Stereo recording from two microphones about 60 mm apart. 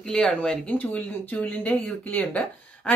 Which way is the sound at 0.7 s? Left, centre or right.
Left.